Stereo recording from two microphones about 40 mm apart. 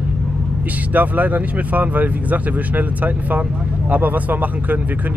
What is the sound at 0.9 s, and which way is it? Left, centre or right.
Speech, right.